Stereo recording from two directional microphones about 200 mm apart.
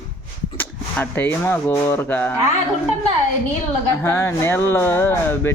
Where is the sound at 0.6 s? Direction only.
10° left (ahead or behind).